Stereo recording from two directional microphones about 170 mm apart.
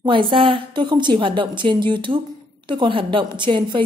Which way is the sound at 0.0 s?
30° right (ahead or behind).